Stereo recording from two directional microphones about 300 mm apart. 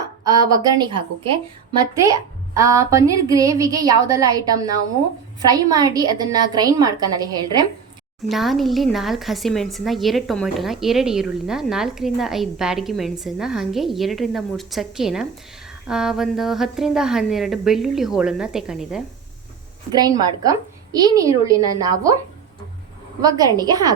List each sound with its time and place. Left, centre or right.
0.3 s a woman's voice: centre
8.3 s a woman's voice: centre
19.9 s a woman's voice: centre
23.2 s a woman's voice: centre